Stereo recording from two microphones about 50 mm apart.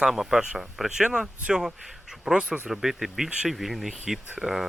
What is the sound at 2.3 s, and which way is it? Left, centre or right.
Speech, centre.